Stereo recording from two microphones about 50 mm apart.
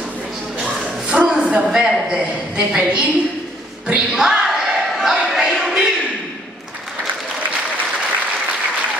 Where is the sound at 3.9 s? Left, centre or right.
Centre.